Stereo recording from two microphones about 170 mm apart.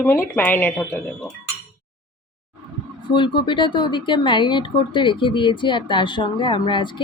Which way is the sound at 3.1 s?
30° left (ahead or behind).